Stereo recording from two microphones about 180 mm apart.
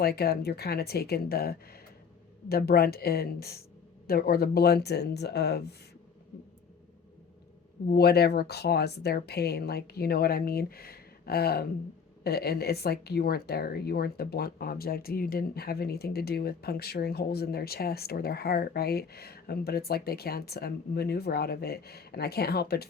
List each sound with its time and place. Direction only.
0.0 s speech: 60° left (ahead or behind)
7.9 s speech: 60° left (ahead or behind)